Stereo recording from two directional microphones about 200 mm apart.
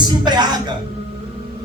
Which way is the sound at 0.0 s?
20° right (ahead or behind).